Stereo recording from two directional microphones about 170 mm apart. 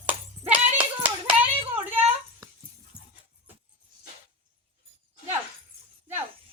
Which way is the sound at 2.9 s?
10° right (ahead or behind).